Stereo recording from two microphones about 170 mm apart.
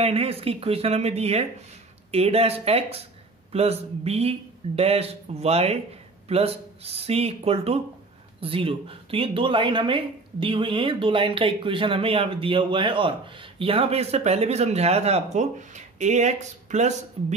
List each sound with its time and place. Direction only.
0.0 s speech: 35° right (ahead or behind)